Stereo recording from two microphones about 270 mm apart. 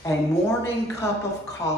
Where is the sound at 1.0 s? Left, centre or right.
Centre.